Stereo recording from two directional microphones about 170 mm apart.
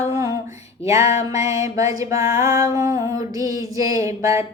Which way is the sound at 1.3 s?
20° right (ahead or behind).